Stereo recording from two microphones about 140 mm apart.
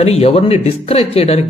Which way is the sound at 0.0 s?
45° left (ahead or behind).